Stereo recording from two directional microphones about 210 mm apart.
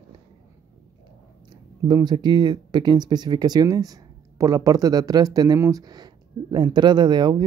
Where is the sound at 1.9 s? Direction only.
20° right (ahead or behind).